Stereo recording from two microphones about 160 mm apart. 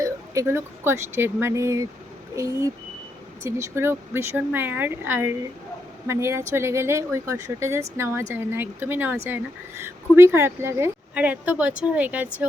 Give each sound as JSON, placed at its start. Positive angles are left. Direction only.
{"t": 0.0, "sound": "speech", "side_deg": -20}